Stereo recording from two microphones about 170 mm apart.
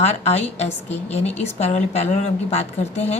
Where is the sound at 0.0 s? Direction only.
40° left (ahead or behind).